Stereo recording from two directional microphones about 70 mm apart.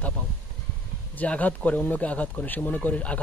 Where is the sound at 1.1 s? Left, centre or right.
Left.